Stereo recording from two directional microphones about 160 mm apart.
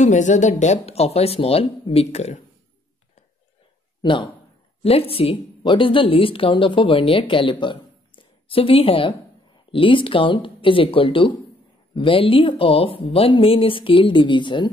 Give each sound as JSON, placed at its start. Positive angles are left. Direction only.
{"t": 0.0, "sound": "a woman's voice", "side_deg": 50}
{"t": 4.0, "sound": "a man's voice", "side_deg": 30}